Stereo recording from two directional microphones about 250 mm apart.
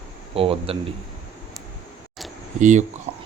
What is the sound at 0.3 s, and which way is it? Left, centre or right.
Speech, right.